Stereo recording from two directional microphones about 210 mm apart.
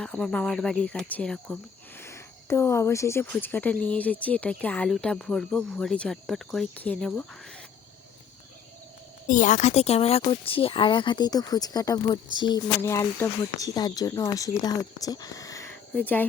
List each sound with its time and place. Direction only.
0.0 s cricket: 5° left (ahead or behind)
2.0 s speech: 15° left (ahead or behind)
9.2 s speech: 35° left (ahead or behind); by 16.2 s 10° left (ahead or behind)